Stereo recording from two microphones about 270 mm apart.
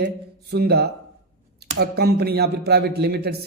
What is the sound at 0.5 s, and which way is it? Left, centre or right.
Speech, right.